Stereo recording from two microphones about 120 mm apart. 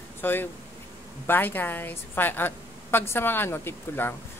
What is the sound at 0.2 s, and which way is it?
Speech, 15° left (ahead or behind).